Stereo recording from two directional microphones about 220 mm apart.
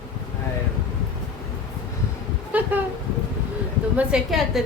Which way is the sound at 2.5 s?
10° right (ahead or behind).